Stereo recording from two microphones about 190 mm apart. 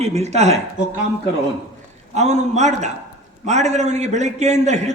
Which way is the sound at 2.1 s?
35° right (ahead or behind).